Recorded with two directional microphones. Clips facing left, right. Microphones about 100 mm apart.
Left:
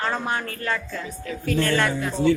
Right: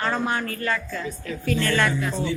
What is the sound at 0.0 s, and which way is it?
Speech, 15° left (ahead or behind).